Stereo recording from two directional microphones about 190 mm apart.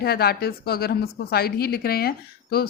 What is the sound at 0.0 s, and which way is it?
Speech, 55° left (ahead or behind).